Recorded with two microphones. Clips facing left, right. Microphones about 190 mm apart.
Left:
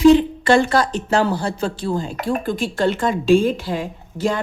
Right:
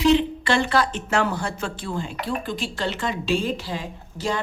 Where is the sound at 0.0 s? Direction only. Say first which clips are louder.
Left 7 dB; 45° left (ahead or behind).